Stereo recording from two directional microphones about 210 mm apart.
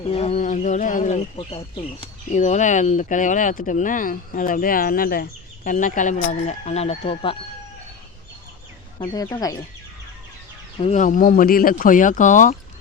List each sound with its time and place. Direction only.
0.1 s speech: 30° left (ahead or behind)
9.0 s speech: 15° left (ahead or behind)
10.8 s speech: 35° left (ahead or behind)